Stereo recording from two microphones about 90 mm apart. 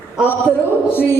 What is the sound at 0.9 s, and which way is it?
Speech, 25° left (ahead or behind).